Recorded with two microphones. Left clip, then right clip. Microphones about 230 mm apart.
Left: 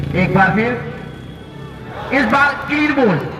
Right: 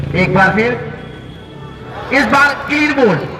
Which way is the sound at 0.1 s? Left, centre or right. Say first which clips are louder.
Right 3 dB; right.